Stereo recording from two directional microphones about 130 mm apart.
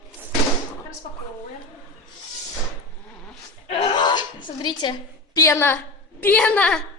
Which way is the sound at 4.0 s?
35° left (ahead or behind).